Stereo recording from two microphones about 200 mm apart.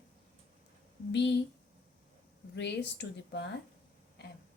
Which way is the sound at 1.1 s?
60° left (ahead or behind).